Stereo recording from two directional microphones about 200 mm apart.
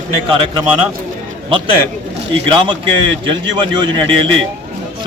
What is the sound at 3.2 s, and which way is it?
Speech, 25° right (ahead or behind).